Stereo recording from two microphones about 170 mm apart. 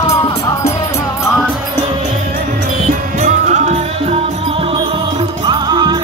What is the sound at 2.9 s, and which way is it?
Music, 45° right (ahead or behind).